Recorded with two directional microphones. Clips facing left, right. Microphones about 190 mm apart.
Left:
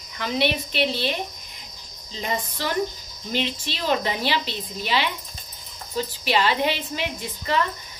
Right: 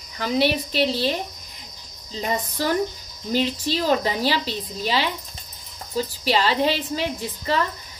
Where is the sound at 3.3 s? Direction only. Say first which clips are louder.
Right 5 dB; 40° right (ahead or behind).